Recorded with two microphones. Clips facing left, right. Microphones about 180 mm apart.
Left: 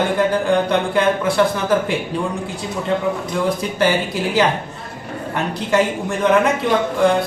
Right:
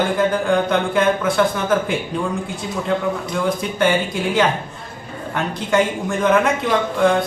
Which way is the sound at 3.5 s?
Centre (ahead or behind).